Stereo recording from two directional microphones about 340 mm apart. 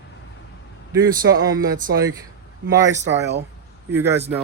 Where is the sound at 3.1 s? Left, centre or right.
Right.